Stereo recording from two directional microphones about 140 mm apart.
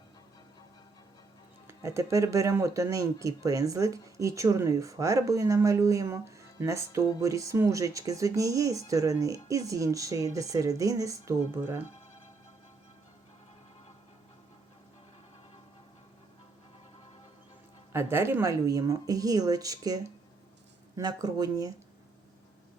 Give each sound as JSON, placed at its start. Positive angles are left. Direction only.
{"t": 1.6, "sound": "speech", "side_deg": -20}
{"t": 17.9, "sound": "speech", "side_deg": -15}